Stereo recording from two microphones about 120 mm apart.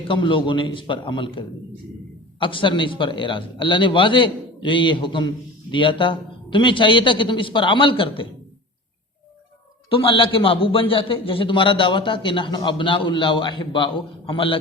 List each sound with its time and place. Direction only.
0.1 s a man's voice: 45° left (ahead or behind)
9.9 s a man's voice: 50° left (ahead or behind)